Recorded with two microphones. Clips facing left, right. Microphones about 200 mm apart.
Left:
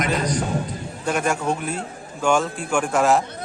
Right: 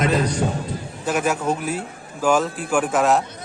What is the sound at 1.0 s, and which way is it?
A man's voice, 5° right (ahead or behind).